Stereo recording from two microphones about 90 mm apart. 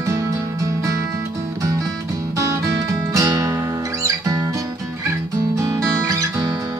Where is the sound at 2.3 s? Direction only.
35° right (ahead or behind).